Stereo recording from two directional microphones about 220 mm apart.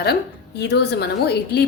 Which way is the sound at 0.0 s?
50° left (ahead or behind).